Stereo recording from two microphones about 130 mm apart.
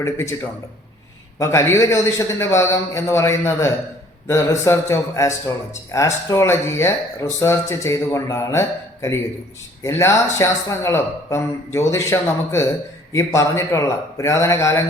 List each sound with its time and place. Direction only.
0.0 s speech: 20° left (ahead or behind)
1.4 s speech: 20° left (ahead or behind)